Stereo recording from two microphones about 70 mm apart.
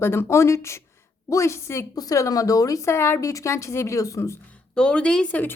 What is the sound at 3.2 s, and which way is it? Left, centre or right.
A woman's voice, left.